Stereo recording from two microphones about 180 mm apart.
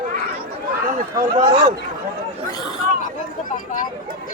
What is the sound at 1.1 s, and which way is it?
Speech, 25° right (ahead or behind).